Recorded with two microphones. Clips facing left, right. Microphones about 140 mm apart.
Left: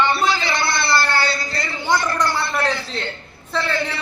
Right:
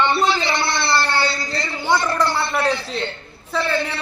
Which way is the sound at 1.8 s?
5° right (ahead or behind).